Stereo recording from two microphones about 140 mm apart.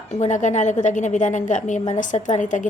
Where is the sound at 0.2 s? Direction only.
60° left (ahead or behind).